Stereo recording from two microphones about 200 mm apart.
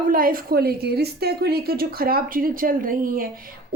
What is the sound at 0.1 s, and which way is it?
Speech, 45° right (ahead or behind).